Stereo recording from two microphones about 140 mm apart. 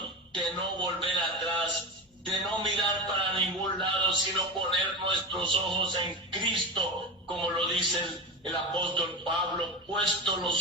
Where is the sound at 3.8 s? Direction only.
35° right (ahead or behind).